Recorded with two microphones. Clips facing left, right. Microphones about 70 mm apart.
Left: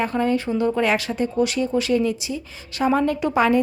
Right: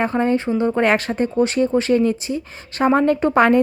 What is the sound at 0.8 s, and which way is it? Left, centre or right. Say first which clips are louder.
A woman's voice: right 3 dB; right.